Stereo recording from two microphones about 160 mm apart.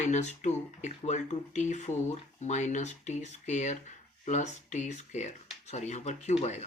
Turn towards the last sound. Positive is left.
turn(degrees=45)  # may be behind; listen again after turning